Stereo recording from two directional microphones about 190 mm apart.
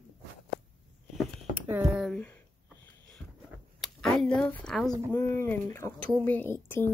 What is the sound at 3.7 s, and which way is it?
Speech, centre (ahead or behind).